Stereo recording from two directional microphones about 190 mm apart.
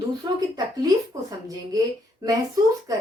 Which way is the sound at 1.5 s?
20° right (ahead or behind).